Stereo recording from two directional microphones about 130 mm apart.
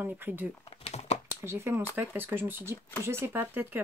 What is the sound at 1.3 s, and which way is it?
Speech, 20° right (ahead or behind).